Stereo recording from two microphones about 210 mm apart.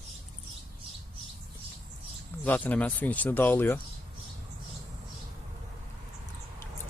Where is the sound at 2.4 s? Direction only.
10° left (ahead or behind).